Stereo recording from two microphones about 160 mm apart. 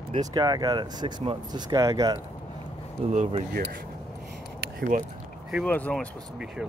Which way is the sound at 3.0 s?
40° right (ahead or behind).